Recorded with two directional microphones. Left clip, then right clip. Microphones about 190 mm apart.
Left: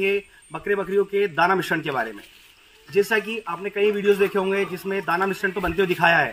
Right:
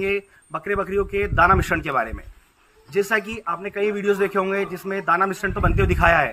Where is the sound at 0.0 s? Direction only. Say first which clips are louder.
Left 1 dB; 10° right (ahead or behind).